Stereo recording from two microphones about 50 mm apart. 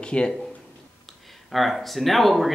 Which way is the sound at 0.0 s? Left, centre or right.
Centre.